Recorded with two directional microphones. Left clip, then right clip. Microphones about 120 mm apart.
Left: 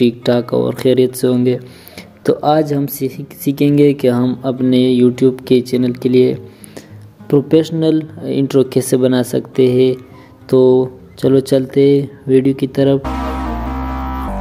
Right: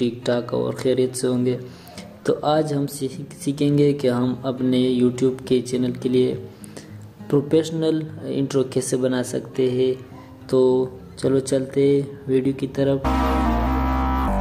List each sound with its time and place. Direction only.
0.0 s speech: 40° left (ahead or behind)
13.0 s music: centre (ahead or behind)